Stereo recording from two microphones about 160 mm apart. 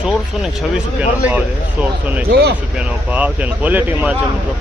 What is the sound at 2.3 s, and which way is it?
Speech, 80° right.